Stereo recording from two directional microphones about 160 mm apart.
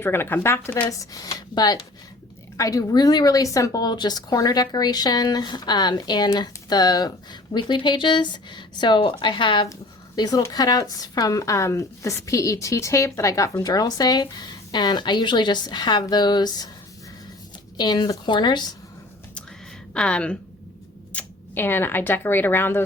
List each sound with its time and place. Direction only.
0.0 s speech: 15° left (ahead or behind)
17.7 s speech: 25° left (ahead or behind)
19.9 s speech: 5° left (ahead or behind)